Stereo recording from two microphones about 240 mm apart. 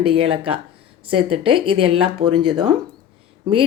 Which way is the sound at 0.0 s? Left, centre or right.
Right.